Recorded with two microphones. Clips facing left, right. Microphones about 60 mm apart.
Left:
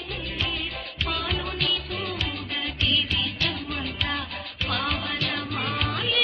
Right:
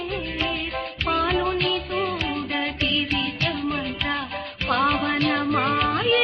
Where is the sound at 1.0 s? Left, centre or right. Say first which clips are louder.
Right 7 dB; right.